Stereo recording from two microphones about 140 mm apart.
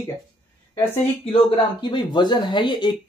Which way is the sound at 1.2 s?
40° left (ahead or behind).